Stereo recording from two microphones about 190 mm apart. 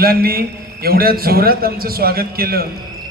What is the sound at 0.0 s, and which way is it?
A man's voice, 55° right (ahead or behind).